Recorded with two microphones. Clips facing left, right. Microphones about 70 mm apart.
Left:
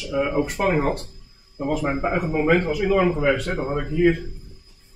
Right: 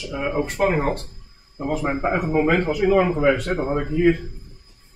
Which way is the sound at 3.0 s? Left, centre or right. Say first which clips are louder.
Right 2 dB; right.